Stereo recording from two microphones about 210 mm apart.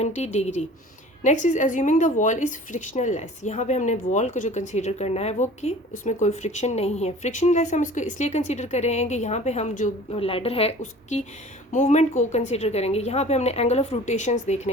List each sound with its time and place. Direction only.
0.0 s a woman's voice: 35° left (ahead or behind)